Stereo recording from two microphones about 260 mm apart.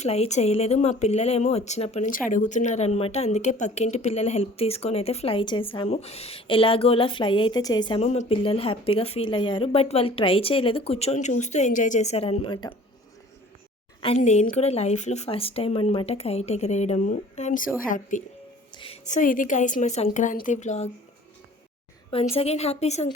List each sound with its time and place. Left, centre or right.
0.0 s speech: left
14.0 s speech: left
22.1 s speech: left